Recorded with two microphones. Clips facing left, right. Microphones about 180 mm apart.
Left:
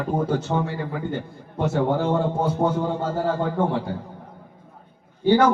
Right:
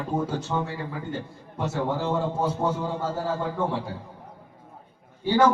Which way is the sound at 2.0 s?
55° left (ahead or behind).